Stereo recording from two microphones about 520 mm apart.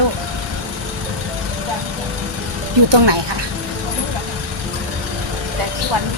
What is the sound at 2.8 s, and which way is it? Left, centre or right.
Speech, right.